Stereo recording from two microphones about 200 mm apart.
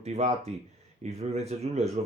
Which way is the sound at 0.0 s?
35° right (ahead or behind).